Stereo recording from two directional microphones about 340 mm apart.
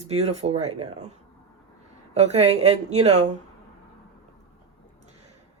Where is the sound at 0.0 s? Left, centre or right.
Centre.